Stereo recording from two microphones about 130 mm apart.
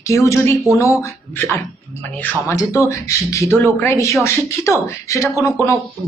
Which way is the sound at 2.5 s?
25° left (ahead or behind).